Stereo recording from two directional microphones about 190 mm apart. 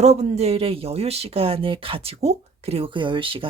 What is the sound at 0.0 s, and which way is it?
Speech, 35° right (ahead or behind).